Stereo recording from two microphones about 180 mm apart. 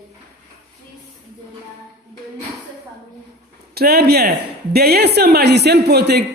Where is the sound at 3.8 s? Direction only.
60° right (ahead or behind).